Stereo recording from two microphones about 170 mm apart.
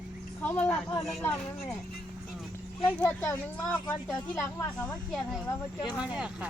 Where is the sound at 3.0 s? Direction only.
10° left (ahead or behind).